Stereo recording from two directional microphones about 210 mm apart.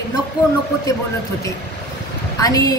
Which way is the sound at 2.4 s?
15° left (ahead or behind).